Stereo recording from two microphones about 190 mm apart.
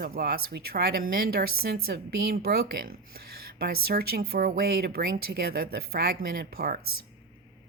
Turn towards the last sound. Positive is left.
turn(degrees=-50)  # may be behind; listen again after turning